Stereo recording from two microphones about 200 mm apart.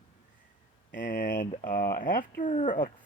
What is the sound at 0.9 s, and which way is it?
Speech, 45° left (ahead or behind).